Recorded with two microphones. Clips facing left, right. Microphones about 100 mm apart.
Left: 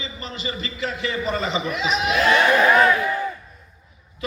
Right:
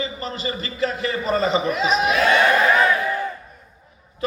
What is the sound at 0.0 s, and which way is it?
A man's voice, 40° right (ahead or behind).